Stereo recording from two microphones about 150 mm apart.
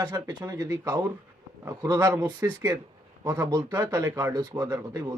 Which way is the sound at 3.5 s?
25° right (ahead or behind).